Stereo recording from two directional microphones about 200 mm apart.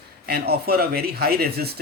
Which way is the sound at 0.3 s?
50° right (ahead or behind).